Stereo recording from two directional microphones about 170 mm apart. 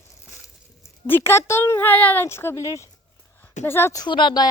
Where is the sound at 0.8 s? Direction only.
15° left (ahead or behind).